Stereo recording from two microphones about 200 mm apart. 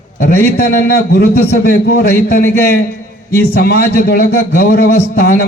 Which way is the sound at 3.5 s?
50° left (ahead or behind).